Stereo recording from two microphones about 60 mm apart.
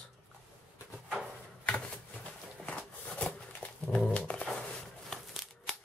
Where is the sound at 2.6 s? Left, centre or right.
Left.